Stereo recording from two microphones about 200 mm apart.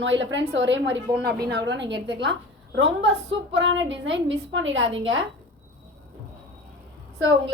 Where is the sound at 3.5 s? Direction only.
65° right (ahead or behind).